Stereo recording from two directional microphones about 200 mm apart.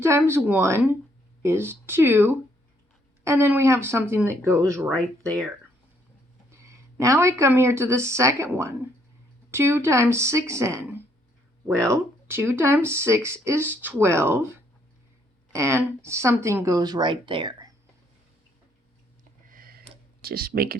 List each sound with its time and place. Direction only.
0.0 s speech: 10° right (ahead or behind)
4.9 s speech: centre (ahead or behind)
6.5 s speech: 15° right (ahead or behind)
15.5 s speech: 15° right (ahead or behind)
19.5 s a sound: 45° right (ahead or behind)
20.2 s speech: 50° right (ahead or behind)